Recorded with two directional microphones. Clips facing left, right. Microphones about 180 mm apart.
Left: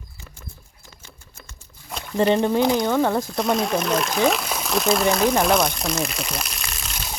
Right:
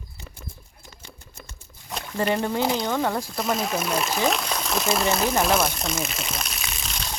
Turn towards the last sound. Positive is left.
turn(degrees=5)  # may be behind; listen again after turning